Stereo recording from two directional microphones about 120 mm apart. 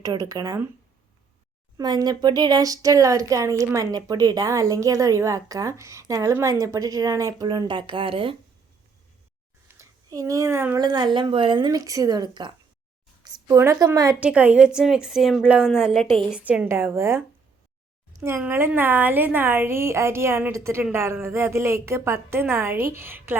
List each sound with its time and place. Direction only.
0.0 s speech: 30° right (ahead or behind)
1.8 s speech: 35° right (ahead or behind)
7.4 s speech: 40° right (ahead or behind)
9.6 s a sound: 25° right (ahead or behind)
10.8 s speech: 35° right (ahead or behind)
13.2 s a sound: 35° right (ahead or behind)
13.8 s speech: 30° right (ahead or behind)
14.2 s a woman's voice: 10° right (ahead or behind)
16.3 s speech: 10° right (ahead or behind)